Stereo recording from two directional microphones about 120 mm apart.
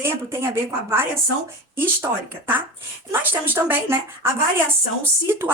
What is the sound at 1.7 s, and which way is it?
A woman's voice, 15° right (ahead or behind).